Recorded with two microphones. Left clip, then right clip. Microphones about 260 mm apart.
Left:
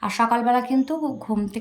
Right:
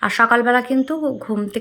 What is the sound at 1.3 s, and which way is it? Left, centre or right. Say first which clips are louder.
Speech: right 3 dB; centre.